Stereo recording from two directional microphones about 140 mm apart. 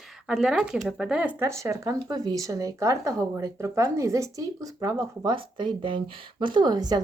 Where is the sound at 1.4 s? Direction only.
20° right (ahead or behind).